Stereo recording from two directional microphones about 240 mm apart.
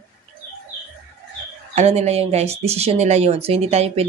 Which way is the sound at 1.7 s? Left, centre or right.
Right.